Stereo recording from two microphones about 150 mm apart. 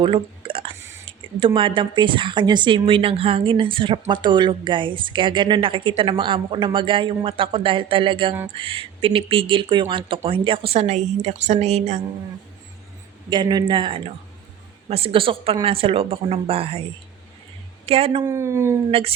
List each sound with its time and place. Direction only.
0.0 s speech: 35° right (ahead or behind)
13.3 s speech: 30° right (ahead or behind)
17.8 s speech: 40° right (ahead or behind)
18.3 s speech: 20° right (ahead or behind)
18.9 s speech: 40° right (ahead or behind)